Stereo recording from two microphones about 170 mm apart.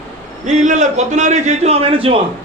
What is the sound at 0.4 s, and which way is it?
A man's voice, 45° right (ahead or behind).